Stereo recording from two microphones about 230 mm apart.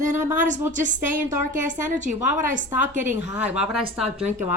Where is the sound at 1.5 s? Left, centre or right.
Right.